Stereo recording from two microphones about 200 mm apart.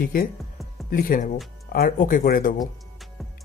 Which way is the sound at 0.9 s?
45° left (ahead or behind).